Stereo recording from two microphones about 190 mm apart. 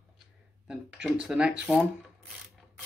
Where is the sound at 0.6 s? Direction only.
5° right (ahead or behind).